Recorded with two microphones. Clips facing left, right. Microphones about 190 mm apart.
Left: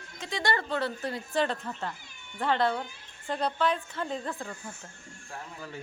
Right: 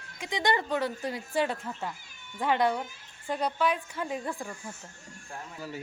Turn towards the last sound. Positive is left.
turn(degrees=-10)  # may be behind; listen again after turning